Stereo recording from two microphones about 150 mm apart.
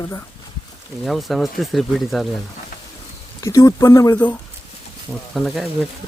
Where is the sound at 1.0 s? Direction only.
Centre (ahead or behind).